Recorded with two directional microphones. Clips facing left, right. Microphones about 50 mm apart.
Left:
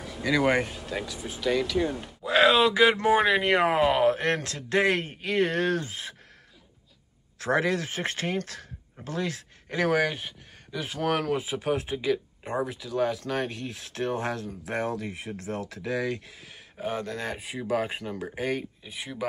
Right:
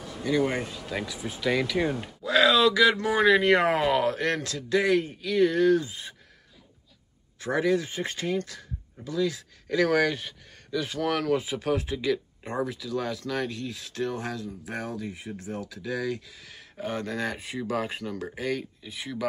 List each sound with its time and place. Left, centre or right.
0.2 s speech: left
0.8 s speech: centre
2.2 s speech: left; by 3.9 s centre
3.9 s speech: left
7.3 s speech: left
9.7 s speech: left
9.9 s speech: centre
13.2 s speech: left
16.4 s speech: centre
18.3 s speech: left
18.6 s speech: centre